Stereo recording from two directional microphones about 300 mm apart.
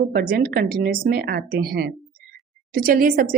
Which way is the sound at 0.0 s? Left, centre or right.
Right.